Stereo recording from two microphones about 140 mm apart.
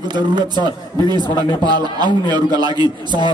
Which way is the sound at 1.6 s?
30° right (ahead or behind).